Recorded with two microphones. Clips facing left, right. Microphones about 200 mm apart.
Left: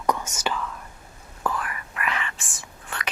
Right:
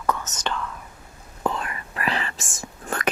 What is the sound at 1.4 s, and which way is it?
Whispering, 25° right (ahead or behind).